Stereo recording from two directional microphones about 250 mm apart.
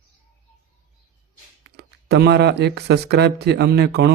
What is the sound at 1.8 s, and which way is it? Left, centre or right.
Speech, right.